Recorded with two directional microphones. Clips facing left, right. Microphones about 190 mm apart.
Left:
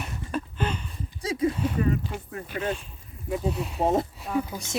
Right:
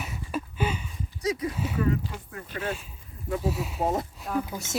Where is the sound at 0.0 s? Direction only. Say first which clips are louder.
Left 1 dB; 5° right (ahead or behind).